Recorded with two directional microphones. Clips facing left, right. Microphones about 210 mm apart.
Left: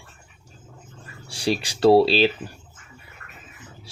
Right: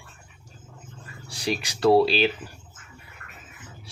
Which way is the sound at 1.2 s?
30° left (ahead or behind).